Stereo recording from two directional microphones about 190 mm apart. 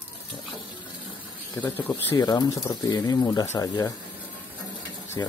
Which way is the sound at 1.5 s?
10° left (ahead or behind).